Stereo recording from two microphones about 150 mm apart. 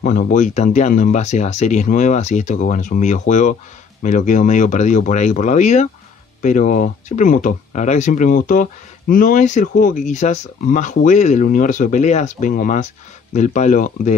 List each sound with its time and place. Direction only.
0.0 s speech: 60° left (ahead or behind)